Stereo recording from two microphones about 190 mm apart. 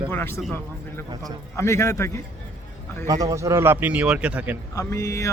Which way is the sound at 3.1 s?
20° right (ahead or behind).